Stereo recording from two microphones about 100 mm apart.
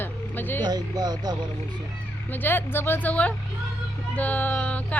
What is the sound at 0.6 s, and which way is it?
Speech, 45° right (ahead or behind).